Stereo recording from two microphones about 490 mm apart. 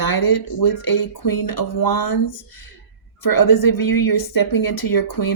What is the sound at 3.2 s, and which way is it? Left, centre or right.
Speech, left.